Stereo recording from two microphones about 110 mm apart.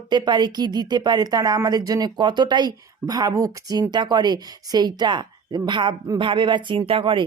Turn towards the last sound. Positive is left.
turn(degrees=-55)  # may be behind; listen again after turning